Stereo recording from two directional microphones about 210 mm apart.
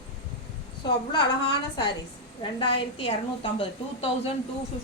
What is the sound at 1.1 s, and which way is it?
A woman's voice, 25° left (ahead or behind).